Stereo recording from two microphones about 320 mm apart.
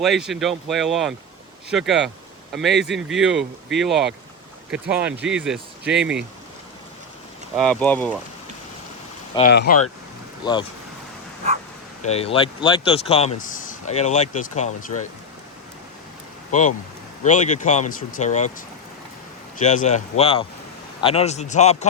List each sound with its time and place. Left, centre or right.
0.0 s speech: centre
7.5 s speech: centre
9.5 s speech: left
10.4 s speech: centre
12.0 s speech: centre
16.5 s speech: left
19.6 s speech: left